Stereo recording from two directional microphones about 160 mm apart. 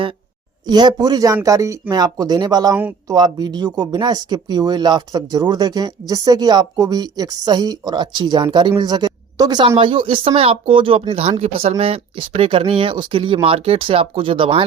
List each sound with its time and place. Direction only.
0.7 s a woman's voice: 25° right (ahead or behind)